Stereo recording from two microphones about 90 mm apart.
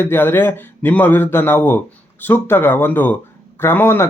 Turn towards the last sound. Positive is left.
turn(degrees=25)  # may be behind; listen again after turning